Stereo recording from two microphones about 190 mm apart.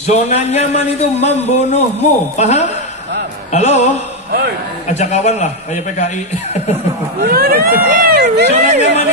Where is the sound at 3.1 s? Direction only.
60° right (ahead or behind).